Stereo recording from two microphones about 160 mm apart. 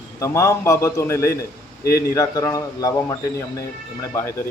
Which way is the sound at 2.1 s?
20° left (ahead or behind).